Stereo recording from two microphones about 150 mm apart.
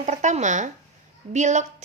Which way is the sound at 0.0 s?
55° right (ahead or behind).